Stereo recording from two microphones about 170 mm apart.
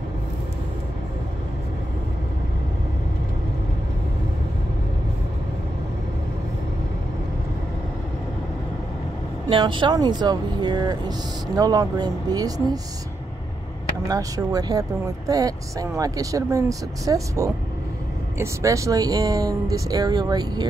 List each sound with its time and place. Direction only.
9.5 s speech: 30° right (ahead or behind)
14.0 s speech: 20° right (ahead or behind)